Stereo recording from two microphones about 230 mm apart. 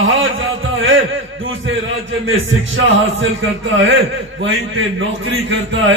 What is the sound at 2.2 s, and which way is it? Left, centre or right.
A man's voice, right.